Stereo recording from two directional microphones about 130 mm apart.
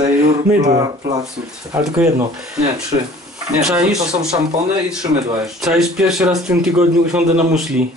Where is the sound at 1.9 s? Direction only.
5° right (ahead or behind).